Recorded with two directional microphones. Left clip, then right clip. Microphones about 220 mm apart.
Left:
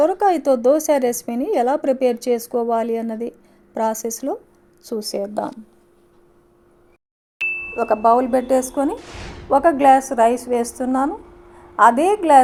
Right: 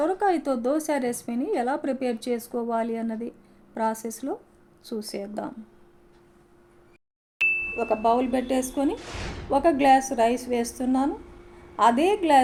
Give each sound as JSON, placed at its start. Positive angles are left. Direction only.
{"t": 0.0, "sound": "speech", "side_deg": 30}
{"t": 4.8, "sound": "speech", "side_deg": 15}
{"t": 5.0, "sound": "a woman's voice", "side_deg": 30}
{"t": 7.3, "sound": "a sound", "side_deg": 0}
{"t": 7.7, "sound": "a woman's voice", "side_deg": 30}
{"t": 8.2, "sound": "speech", "side_deg": 55}
{"t": 8.5, "sound": "a woman's voice", "side_deg": 25}
{"t": 9.0, "sound": "a woman's voice", "side_deg": 0}
{"t": 9.5, "sound": "a woman's voice", "side_deg": 20}